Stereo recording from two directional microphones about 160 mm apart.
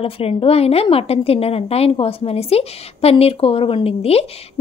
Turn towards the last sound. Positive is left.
turn(degrees=40)  # may be behind; listen again after turning